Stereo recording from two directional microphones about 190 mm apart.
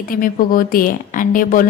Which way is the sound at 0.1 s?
50° left (ahead or behind).